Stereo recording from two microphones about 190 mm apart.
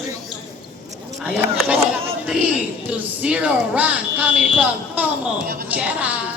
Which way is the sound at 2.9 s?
5° right (ahead or behind).